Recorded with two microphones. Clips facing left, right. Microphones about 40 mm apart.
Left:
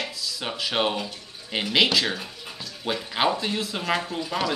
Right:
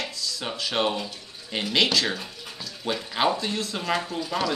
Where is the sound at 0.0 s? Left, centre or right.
Centre.